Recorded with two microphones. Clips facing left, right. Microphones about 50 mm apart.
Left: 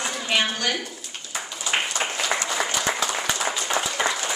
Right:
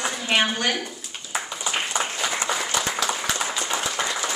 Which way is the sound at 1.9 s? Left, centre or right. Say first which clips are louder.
Even; right.